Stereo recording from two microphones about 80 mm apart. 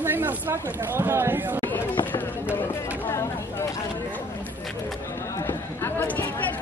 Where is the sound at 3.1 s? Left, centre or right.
Left.